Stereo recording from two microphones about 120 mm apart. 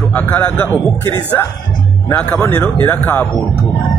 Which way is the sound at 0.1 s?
15° left (ahead or behind).